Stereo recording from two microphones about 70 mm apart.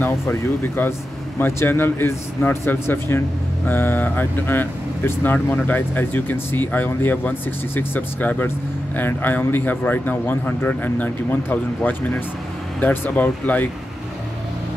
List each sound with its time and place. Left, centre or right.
0.0 s a man's voice: left